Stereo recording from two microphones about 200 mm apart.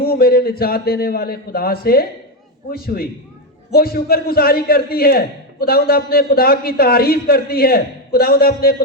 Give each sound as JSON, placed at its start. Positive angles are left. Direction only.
{"t": 0.0, "sound": "a man's voice", "side_deg": 50}